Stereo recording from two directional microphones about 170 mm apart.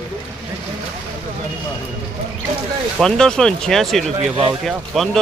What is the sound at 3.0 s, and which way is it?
Speech, 5° left (ahead or behind).